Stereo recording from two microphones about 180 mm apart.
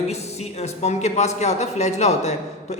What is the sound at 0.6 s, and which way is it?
A man's voice, 40° left (ahead or behind).